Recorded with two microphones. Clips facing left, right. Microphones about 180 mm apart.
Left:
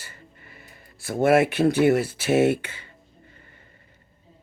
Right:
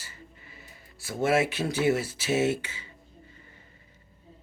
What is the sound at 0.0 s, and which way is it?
Speech, 55° left (ahead or behind).